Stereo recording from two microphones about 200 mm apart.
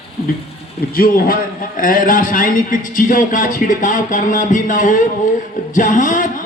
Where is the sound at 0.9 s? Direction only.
45° left (ahead or behind).